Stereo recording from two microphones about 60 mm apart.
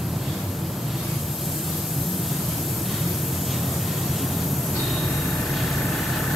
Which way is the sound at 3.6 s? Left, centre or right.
Centre.